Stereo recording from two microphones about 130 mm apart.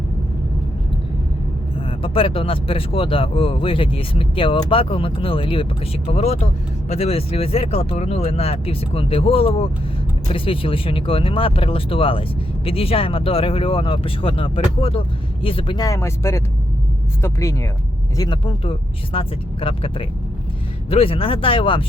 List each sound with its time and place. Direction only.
1.9 s speech: 45° left (ahead or behind)
15.8 s speech: 20° left (ahead or behind)
18.2 s speech: 40° left (ahead or behind)